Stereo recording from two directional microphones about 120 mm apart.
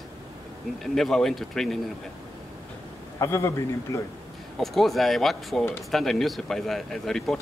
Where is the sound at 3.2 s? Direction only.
25° left (ahead or behind).